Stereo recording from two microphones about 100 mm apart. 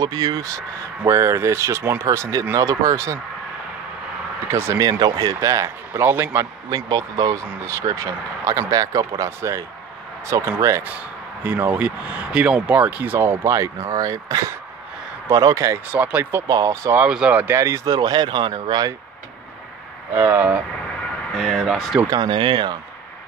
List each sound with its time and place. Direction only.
0.0 s speech: 40° right (ahead or behind)
4.5 s speech: 25° right (ahead or behind)
4.8 s speech: 45° right (ahead or behind)
5.4 s speech: 30° right (ahead or behind)
6.7 s speech: 40° right (ahead or behind)
11.4 s speech: 15° right (ahead or behind)
13.5 s speech: 30° right (ahead or behind)
15.9 s speech: 15° right (ahead or behind)
16.4 s speech: 35° right (ahead or behind)
16.9 s speech: 10° right (ahead or behind)
17.6 s speech: 30° right (ahead or behind); by 18.9 s 50° right (ahead or behind)
20.2 s speech: 20° right (ahead or behind)
21.4 s speech: centre (ahead or behind)
22.0 s speech: 45° right (ahead or behind)